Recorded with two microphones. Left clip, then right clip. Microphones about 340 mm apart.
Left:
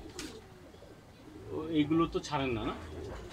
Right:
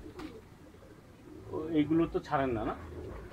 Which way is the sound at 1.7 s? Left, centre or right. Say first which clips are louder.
Even; right.